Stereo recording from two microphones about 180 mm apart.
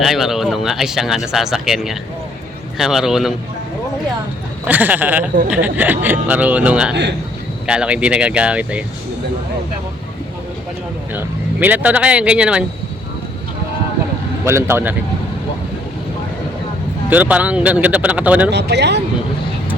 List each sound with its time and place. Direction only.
0.0 s speech: centre (ahead or behind)
4.6 s speech: 10° right (ahead or behind)
6.9 s speech: 70° right (ahead or behind)
7.7 s speech: 5° right (ahead or behind)
11.1 s speech: 10° right (ahead or behind)
14.4 s speech: 15° right (ahead or behind)
17.1 s speech: 10° right (ahead or behind)
18.5 s speech: 70° right (ahead or behind)